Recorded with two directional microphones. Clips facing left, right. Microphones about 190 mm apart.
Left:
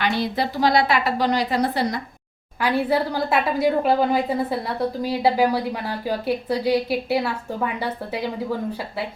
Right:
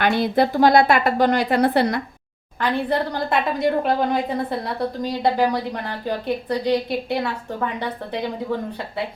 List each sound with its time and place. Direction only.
0.0 s a woman's voice: 50° right (ahead or behind)
2.6 s a woman's voice: 5° left (ahead or behind)